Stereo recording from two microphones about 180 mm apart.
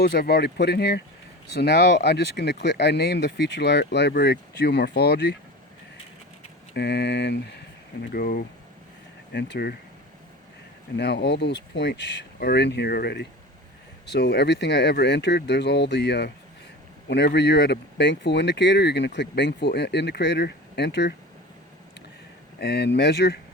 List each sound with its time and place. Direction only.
0.0 s speech: 65° left (ahead or behind)
6.7 s speech: 70° left (ahead or behind)
8.1 s speech: 55° left (ahead or behind)
9.3 s speech: 70° left (ahead or behind)
10.9 s speech: 70° left (ahead or behind)
22.6 s speech: 70° left (ahead or behind)